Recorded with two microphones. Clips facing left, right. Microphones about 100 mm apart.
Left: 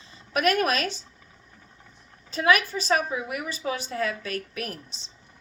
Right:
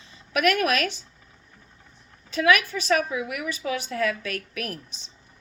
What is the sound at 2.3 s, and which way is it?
A woman's voice, 35° left (ahead or behind).